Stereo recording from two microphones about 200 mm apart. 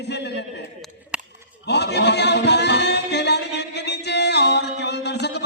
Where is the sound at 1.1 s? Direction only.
5° right (ahead or behind).